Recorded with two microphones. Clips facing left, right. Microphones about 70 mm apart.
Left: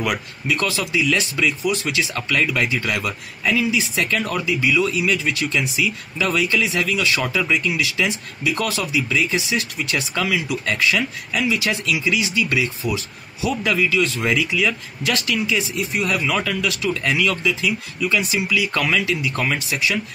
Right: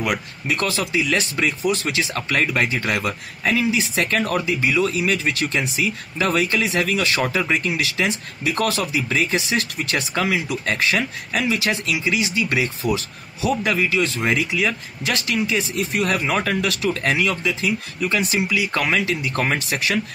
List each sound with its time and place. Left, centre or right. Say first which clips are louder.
0.5 s speech: even; right
16.2 s speech: right 1 dB; right
17.3 s speech: left 1 dB; right
17.6 s speech: even; right
18.6 s speech: even; right